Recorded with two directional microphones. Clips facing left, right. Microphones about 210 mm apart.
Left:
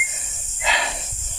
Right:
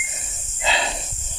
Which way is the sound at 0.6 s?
30° right (ahead or behind).